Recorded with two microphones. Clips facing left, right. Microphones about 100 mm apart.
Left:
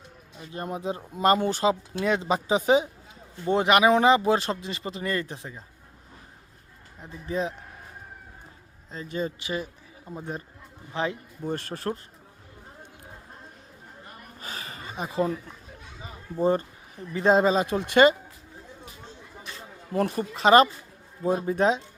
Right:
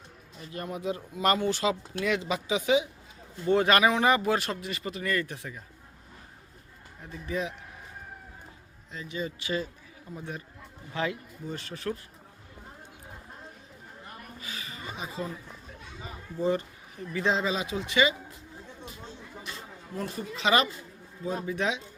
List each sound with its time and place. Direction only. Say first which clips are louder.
0.3 s speech: left 3 dB; 30° left (ahead or behind)
3.4 s speech: left 2 dB; 25° left (ahead or behind)
7.0 s speech: left 3 dB; 30° left (ahead or behind)
8.9 s speech: left 4 dB; 40° left (ahead or behind)
9.4 s speech: even; 20° left (ahead or behind)
10.1 s speech: left 4 dB; 35° left (ahead or behind)
10.9 s speech: left 2 dB; 20° left (ahead or behind)
11.4 s speech: left 5 dB; 55° left (ahead or behind)
14.4 s a sound: left 3 dB; 40° left (ahead or behind)
16.4 s speech: left 4 dB; 45° left (ahead or behind)
19.9 s speech: left 9 dB; 60° left (ahead or behind); by 21.8 s 40° left (ahead or behind)